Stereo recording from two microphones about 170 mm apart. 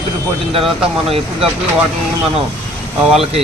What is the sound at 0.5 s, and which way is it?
Speech, 35° right (ahead or behind).